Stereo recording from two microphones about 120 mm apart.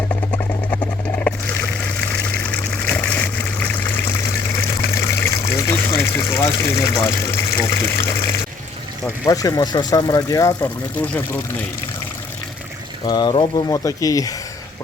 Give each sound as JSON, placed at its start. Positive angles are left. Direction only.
{"t": 1.2, "sound": "a sound", "side_deg": 10}
{"t": 5.1, "sound": "water", "side_deg": 20}
{"t": 9.0, "sound": "speech", "side_deg": 30}
{"t": 10.6, "sound": "speech", "side_deg": 15}
{"t": 13.1, "sound": "speech", "side_deg": 35}
{"t": 13.7, "sound": "speech", "side_deg": 30}